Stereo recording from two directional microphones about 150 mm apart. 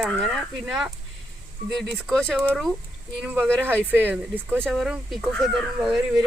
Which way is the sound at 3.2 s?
10° right (ahead or behind).